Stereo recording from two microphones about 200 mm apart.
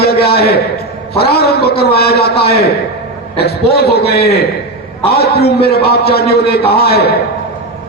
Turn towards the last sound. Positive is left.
turn(degrees=50)  # may be behind; listen again after turning